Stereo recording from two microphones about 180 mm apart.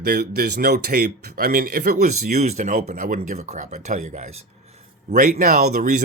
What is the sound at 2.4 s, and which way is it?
Speech, 40° right (ahead or behind).